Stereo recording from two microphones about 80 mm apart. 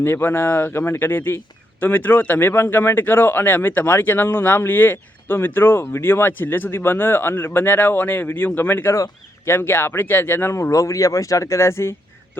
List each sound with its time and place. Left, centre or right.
0.0 s a man's voice: left